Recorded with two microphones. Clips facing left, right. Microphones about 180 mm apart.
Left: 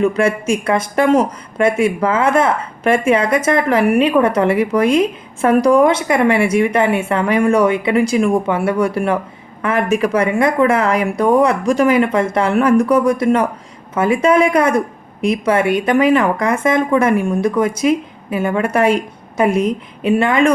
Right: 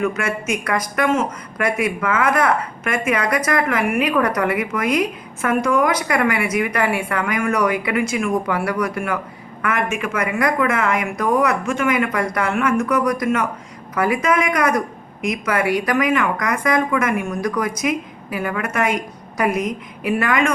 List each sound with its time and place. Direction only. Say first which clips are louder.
0.0 s speech: left 7 dB; 30° left (ahead or behind)